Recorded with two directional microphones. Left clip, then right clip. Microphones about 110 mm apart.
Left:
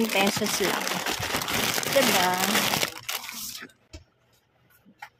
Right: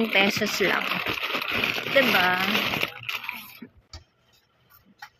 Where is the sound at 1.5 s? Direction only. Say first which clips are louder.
Right 1 dB; 70° left (ahead or behind).